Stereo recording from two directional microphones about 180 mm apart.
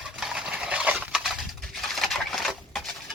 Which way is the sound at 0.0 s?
Centre (ahead or behind).